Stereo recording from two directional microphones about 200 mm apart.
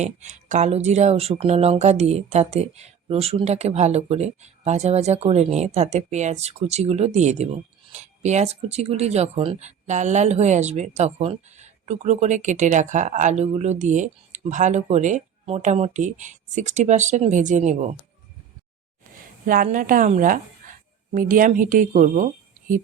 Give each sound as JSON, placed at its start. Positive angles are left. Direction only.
{"t": 0.0, "sound": "speech", "side_deg": -35}
{"t": 19.5, "sound": "a woman's voice", "side_deg": -45}